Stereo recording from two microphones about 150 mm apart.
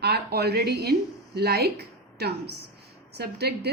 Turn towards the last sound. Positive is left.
turn(degrees=-90)